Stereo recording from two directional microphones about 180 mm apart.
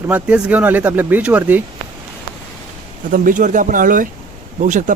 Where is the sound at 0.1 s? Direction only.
5° right (ahead or behind).